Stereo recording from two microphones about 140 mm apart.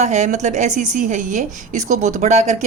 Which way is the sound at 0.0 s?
55° right (ahead or behind).